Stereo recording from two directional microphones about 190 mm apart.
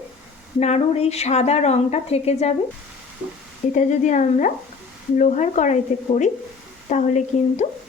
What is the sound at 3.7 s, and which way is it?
A woman's voice, 40° left (ahead or behind).